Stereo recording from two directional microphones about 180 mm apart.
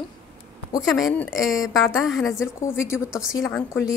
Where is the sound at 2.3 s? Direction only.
15° left (ahead or behind).